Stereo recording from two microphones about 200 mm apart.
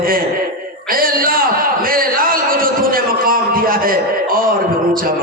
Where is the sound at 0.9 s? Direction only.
45° right (ahead or behind).